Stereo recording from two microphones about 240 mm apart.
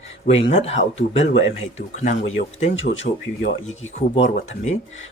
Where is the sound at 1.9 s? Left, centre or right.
Left.